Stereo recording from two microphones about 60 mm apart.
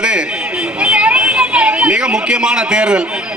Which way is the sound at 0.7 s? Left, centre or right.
Centre.